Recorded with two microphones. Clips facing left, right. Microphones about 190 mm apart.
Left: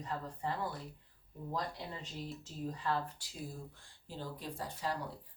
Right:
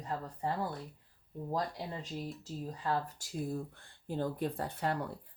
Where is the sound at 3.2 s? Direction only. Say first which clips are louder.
Right 13 dB; 45° right (ahead or behind).